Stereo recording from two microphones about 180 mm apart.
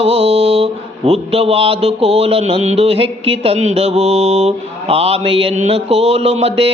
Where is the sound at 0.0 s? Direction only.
35° right (ahead or behind).